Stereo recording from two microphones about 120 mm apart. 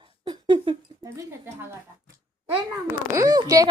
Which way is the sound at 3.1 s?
30° right (ahead or behind).